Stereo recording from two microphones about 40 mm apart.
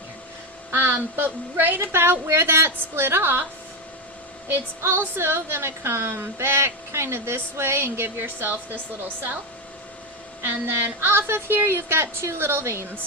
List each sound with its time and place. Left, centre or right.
0.7 s a woman's voice: right
2.4 s a woman's voice: right
4.4 s a woman's voice: right
10.4 s child singing: right
11.3 s a woman's voice: right